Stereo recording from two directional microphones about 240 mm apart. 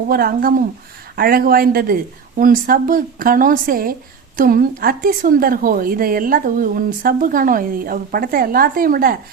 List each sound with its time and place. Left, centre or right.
0.1 s a woman's voice: right